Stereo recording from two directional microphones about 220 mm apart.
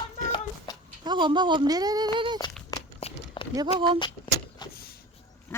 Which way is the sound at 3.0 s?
25° left (ahead or behind).